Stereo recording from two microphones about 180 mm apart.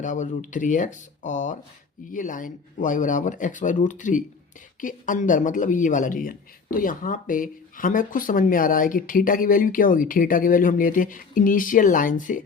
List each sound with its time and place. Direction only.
0.0 s speech: 45° left (ahead or behind)